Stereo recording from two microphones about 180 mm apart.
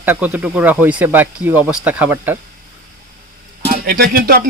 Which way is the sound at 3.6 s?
55° right (ahead or behind).